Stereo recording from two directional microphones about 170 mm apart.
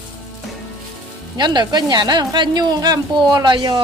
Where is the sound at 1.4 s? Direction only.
25° right (ahead or behind).